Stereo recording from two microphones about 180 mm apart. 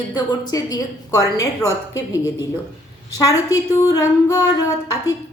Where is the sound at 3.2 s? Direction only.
20° left (ahead or behind).